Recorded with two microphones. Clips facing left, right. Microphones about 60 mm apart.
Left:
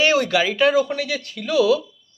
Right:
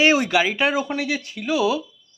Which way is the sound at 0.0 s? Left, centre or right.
Right.